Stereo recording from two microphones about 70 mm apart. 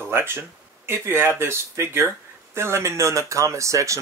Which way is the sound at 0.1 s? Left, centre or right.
Right.